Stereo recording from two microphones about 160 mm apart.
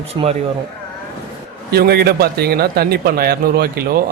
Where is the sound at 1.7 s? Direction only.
85° right.